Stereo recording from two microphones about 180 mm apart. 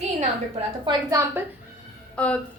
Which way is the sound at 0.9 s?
15° right (ahead or behind).